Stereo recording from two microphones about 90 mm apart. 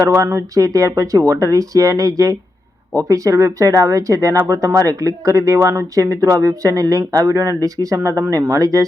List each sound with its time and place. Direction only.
0.0 s speech: 35° right (ahead or behind)